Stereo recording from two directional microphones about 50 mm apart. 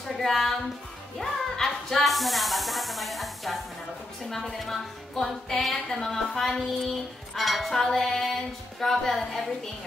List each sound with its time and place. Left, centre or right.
0.2 s a woman's voice: centre
4.3 s music: centre
5.9 s a woman's voice: centre
7.3 s music: centre